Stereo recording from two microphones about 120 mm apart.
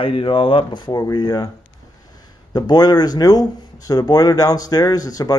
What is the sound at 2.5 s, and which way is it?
Speech, 35° left (ahead or behind).